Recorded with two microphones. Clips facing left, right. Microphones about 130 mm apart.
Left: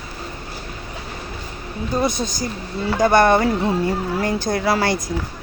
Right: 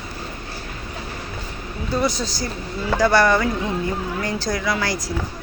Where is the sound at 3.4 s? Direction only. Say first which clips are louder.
Left 4 dB; 35° left (ahead or behind).